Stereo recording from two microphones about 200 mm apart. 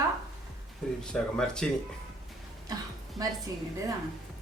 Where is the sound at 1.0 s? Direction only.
5° left (ahead or behind).